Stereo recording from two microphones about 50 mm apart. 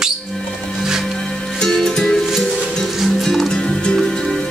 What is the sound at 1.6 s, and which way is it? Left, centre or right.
Music, centre.